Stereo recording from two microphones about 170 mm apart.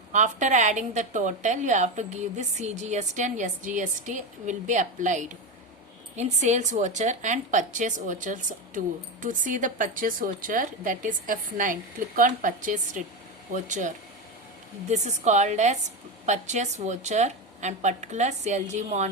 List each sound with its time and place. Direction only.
0.1 s a woman's voice: 45° right (ahead or behind)